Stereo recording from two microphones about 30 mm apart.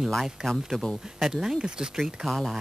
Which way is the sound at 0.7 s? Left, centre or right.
Centre.